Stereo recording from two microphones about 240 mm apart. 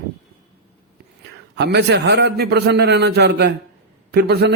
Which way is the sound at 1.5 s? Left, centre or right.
Right.